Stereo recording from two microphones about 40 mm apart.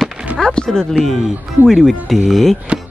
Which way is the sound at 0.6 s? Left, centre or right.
Centre.